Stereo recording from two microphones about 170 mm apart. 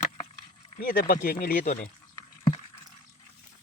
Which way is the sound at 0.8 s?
60° left (ahead or behind).